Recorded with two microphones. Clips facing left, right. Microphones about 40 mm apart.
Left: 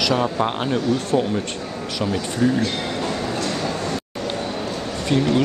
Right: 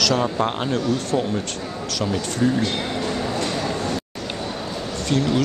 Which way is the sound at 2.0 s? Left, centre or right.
Centre.